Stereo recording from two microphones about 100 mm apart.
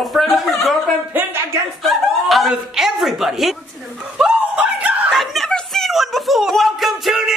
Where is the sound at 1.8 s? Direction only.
Centre (ahead or behind).